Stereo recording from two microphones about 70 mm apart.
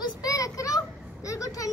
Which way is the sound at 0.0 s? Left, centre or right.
Left.